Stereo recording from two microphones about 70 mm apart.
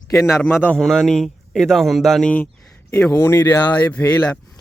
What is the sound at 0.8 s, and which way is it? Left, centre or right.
A man's voice, centre.